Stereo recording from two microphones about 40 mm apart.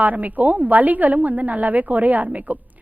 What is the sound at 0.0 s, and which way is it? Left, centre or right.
A woman's voice, right.